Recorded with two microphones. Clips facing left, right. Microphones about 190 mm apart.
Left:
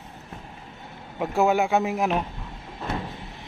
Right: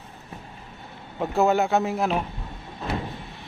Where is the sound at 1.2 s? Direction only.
10° left (ahead or behind).